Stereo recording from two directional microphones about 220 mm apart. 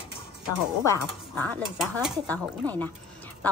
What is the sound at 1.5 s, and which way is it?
Speech, 10° left (ahead or behind).